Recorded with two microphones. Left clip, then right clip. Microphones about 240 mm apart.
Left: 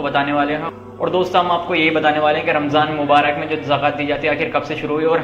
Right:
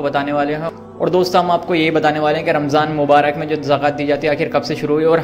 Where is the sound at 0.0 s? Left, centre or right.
Right.